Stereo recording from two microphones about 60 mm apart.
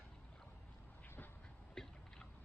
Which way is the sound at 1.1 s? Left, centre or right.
Left.